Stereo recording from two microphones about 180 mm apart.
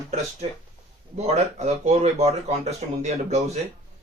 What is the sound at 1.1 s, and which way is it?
Speech, 35° right (ahead or behind).